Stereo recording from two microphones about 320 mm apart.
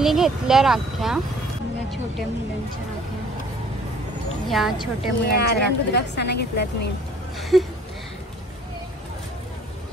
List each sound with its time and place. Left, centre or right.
0.0 s speech: centre
4.5 s speech: centre
5.2 s a woman's voice: left
7.3 s speech: centre